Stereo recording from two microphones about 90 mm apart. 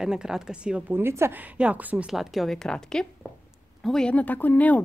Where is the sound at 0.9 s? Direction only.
30° right (ahead or behind).